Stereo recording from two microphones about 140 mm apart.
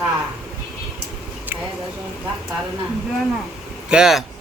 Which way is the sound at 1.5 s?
15° right (ahead or behind).